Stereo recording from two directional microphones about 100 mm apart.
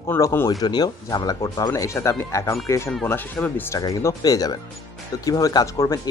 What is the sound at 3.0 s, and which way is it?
Speech, 20° left (ahead or behind).